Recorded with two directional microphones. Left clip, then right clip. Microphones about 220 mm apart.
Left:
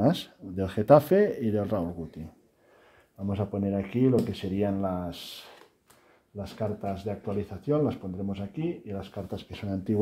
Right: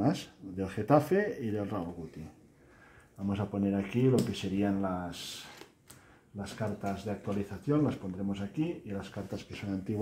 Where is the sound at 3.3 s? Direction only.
30° left (ahead or behind).